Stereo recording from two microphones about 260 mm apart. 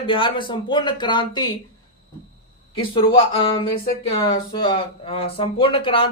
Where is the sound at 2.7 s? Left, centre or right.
Centre.